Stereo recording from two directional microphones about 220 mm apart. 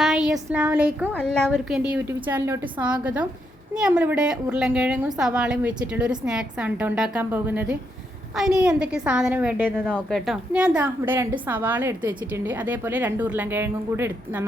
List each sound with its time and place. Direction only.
0.0 s a sound: 5° right (ahead or behind)
0.3 s a woman's voice: 10° right (ahead or behind)
9.8 s a woman's voice: 5° left (ahead or behind)